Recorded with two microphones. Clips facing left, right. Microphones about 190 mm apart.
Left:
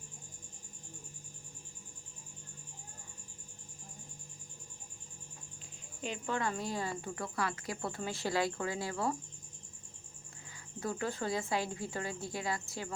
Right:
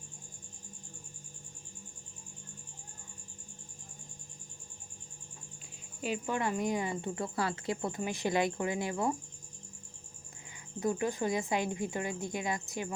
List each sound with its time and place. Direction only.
6.0 s speech: 10° right (ahead or behind)
10.8 s speech: 20° right (ahead or behind)